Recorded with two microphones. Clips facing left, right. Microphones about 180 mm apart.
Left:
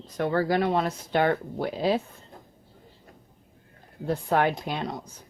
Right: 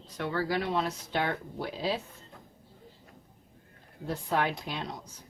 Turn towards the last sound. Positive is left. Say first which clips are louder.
# left 6 dB
turn(degrees=55)  # may be behind; listen again after turning